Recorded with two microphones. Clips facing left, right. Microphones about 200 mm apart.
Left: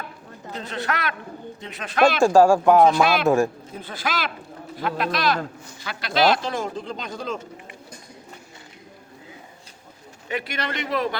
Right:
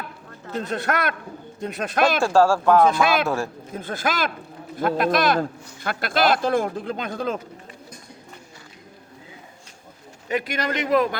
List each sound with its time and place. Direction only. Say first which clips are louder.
0.5 s a man's voice: right 4 dB; 50° right (ahead or behind)
2.2 s speech: left 4 dB; 15° left (ahead or behind)
3.8 s a man's voice: right 3 dB; 50° right (ahead or behind)
10.2 s a man's voice: right 4 dB; 40° right (ahead or behind)